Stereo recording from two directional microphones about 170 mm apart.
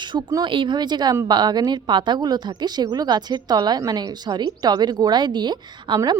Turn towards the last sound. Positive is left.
turn(degrees=-25)  # may be behind; listen again after turning